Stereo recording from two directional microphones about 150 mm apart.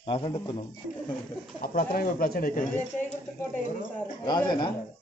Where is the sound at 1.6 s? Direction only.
75° left (ahead or behind).